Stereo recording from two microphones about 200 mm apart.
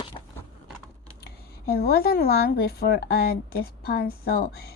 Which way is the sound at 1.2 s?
55° left (ahead or behind).